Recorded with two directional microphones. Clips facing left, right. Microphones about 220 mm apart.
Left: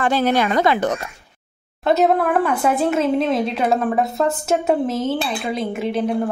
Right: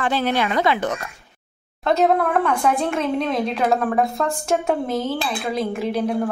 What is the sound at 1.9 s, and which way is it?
Speech, 5° left (ahead or behind).